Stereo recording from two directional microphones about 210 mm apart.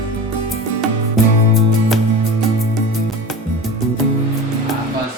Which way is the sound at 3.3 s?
Centre (ahead or behind).